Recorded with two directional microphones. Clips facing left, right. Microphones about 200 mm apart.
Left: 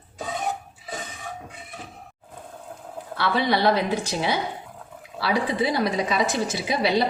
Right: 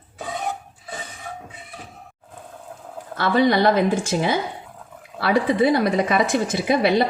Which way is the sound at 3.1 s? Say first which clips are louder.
Right 5 dB; 45° right (ahead or behind).